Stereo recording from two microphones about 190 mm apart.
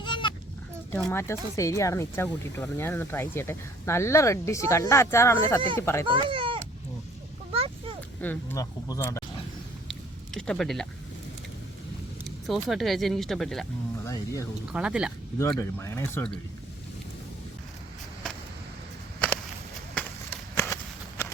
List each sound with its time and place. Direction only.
0.0 s sheep: 25° left (ahead or behind)
0.9 s speech: 10° left (ahead or behind)
6.1 s speech: 25° right (ahead or behind)
7.5 s a sound: 30° right (ahead or behind)
8.2 s speech: 10° left (ahead or behind)
9.9 s a sound: 5° left (ahead or behind)
12.6 s speech: centre (ahead or behind)
14.0 s speech: 15° left (ahead or behind)
14.7 s speech: 5° right (ahead or behind)
15.5 s speech: 15° left (ahead or behind)
19.9 s a sound: 10° left (ahead or behind)
21.2 s walk: 10° left (ahead or behind)